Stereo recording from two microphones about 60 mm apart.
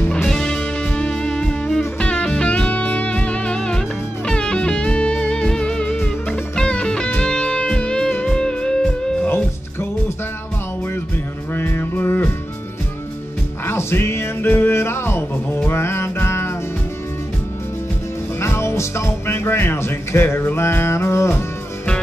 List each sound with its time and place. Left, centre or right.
0.3 s music: centre
5.9 s music: left
6.5 s music: centre
9.3 s music: left
11.5 s music: left
13.7 s music: left
18.4 s music: left